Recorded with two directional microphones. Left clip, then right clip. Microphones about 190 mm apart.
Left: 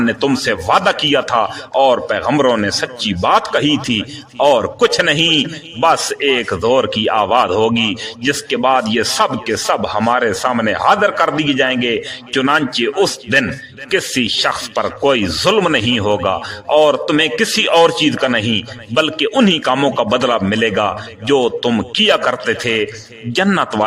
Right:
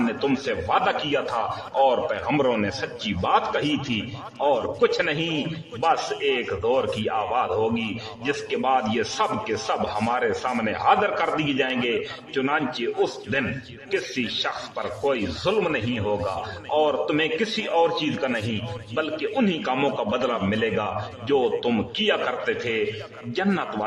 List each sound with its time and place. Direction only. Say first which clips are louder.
0.1 s speech: left 9 dB; 25° left (ahead or behind)